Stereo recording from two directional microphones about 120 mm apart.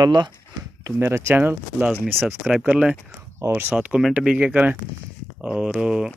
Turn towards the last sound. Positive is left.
turn(degrees=-5)  # may be behind; listen again after turning